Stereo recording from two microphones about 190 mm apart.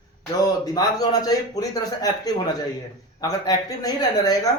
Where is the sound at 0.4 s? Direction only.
20° left (ahead or behind).